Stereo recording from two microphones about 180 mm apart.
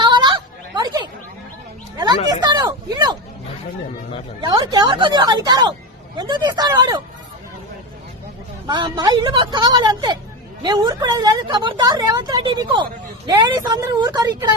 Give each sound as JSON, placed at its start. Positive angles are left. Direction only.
{"t": 0.0, "sound": "a sound", "side_deg": -25}
{"t": 2.0, "sound": "a woman's voice", "side_deg": -20}
{"t": 4.4, "sound": "a woman's voice", "side_deg": -25}
{"t": 8.6, "sound": "a woman's voice", "side_deg": -25}